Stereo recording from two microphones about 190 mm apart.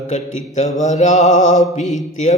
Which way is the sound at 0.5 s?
40° left (ahead or behind).